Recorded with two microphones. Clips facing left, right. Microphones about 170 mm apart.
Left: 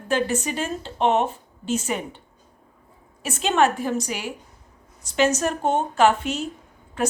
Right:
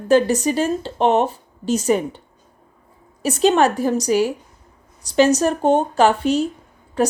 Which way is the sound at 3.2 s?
35° right (ahead or behind).